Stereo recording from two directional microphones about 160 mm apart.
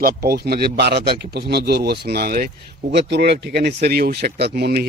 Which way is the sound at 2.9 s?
90° right.